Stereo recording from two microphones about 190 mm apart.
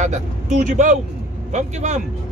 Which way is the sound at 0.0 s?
40° right (ahead or behind).